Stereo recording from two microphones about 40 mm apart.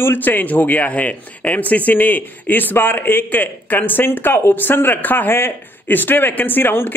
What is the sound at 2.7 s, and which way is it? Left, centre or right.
Speech, left.